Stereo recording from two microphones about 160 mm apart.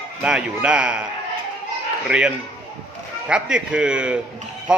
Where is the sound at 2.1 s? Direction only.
5° right (ahead or behind).